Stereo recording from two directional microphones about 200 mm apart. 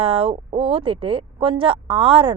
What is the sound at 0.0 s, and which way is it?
Speech, 30° right (ahead or behind).